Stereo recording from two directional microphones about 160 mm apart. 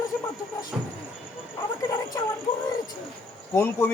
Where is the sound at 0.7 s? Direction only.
5° right (ahead or behind).